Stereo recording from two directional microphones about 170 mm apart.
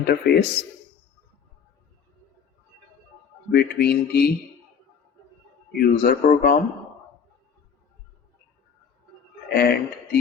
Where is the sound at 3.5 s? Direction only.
70° left (ahead or behind).